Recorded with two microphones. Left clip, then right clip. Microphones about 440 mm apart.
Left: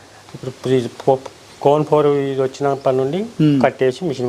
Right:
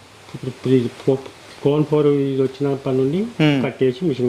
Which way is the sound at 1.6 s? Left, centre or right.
Left.